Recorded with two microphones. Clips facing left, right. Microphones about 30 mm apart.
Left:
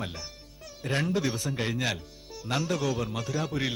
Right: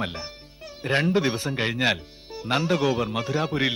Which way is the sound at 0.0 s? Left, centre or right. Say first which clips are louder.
Right 6 dB; right.